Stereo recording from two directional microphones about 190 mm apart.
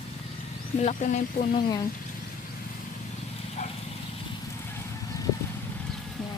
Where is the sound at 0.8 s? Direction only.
40° left (ahead or behind).